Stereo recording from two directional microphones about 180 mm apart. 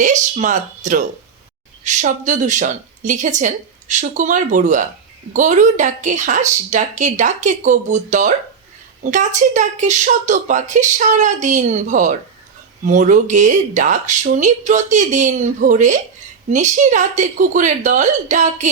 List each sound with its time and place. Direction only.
0.0 s a woman's voice: 45° right (ahead or behind)